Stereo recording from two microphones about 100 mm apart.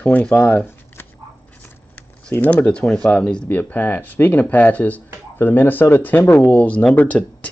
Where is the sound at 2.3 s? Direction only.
20° left (ahead or behind).